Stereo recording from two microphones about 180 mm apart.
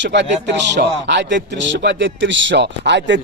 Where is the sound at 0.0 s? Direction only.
80° right.